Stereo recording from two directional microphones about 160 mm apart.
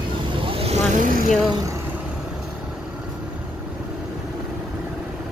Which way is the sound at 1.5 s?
20° right (ahead or behind).